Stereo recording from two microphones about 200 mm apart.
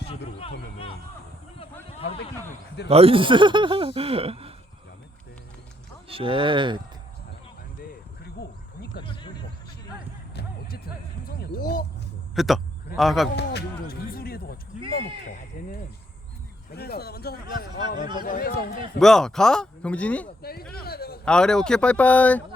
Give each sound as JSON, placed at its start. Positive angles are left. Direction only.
{"t": 2.0, "sound": "speech", "side_deg": 30}
{"t": 2.9, "sound": "speech", "side_deg": -30}
{"t": 6.1, "sound": "speech", "side_deg": -25}
{"t": 8.2, "sound": "a sound", "side_deg": 55}
{"t": 10.3, "sound": "music", "side_deg": 50}
{"t": 11.3, "sound": "speech", "side_deg": 45}
{"t": 12.3, "sound": "speech", "side_deg": 0}
{"t": 13.3, "sound": "a sound", "side_deg": 55}
{"t": 15.6, "sound": "speech", "side_deg": 40}
{"t": 16.7, "sound": "speech", "side_deg": 50}
{"t": 18.9, "sound": "speech", "side_deg": 0}
{"t": 20.2, "sound": "speech", "side_deg": 50}
{"t": 20.7, "sound": "a sound", "side_deg": 50}
{"t": 21.2, "sound": "speech", "side_deg": 5}